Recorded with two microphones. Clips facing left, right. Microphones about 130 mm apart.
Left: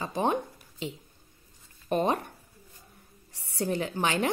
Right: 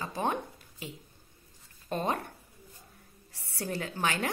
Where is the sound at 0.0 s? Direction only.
20° left (ahead or behind).